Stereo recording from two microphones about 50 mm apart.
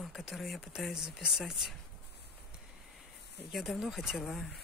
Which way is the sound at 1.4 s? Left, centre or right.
Centre.